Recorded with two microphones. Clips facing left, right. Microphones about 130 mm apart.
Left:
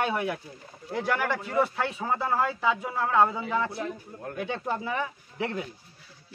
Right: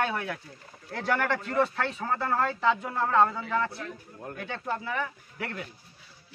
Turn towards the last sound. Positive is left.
turn(degrees=20)  # may be behind; listen again after turning